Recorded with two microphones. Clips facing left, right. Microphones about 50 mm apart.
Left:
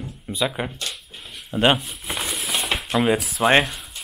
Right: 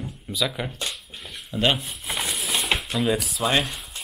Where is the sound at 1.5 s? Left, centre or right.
Left.